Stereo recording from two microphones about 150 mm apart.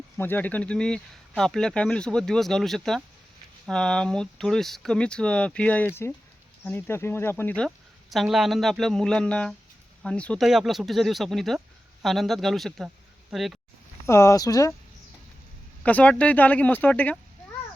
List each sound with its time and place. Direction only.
0.2 s speech: 15° left (ahead or behind)
8.1 s speech: centre (ahead or behind)
14.1 s speech: 20° left (ahead or behind)
15.8 s speech: 10° left (ahead or behind)